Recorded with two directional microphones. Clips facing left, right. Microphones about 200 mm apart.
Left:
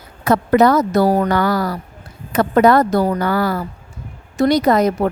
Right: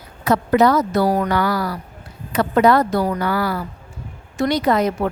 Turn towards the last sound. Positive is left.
turn(degrees=40)  # may be behind; listen again after turning